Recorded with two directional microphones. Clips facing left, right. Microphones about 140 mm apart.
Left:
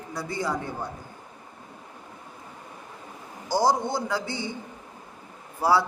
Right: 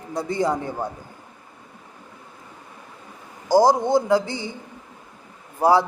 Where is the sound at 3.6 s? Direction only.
15° right (ahead or behind).